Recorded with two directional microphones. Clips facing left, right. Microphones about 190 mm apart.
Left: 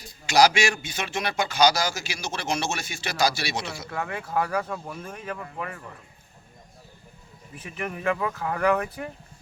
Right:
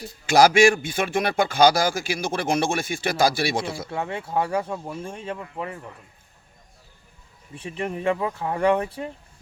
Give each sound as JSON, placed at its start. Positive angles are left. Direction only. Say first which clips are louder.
{"t": 0.3, "sound": "a man's voice", "louder": "right 5 dB", "side_deg": -50}
{"t": 3.8, "sound": "speech", "louder": "right 3 dB", "side_deg": -25}
{"t": 7.5, "sound": "speech", "louder": "right 4 dB", "side_deg": -30}